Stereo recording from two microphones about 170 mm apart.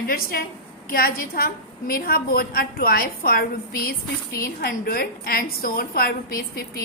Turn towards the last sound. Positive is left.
turn(degrees=60)  # may be behind; listen again after turning